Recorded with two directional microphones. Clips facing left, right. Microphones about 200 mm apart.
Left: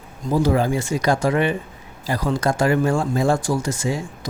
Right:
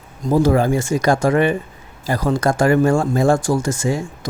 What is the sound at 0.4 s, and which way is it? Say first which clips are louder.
Speech: right 3 dB; 50° right (ahead or behind).